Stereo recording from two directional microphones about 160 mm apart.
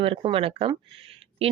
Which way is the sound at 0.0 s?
35° right (ahead or behind).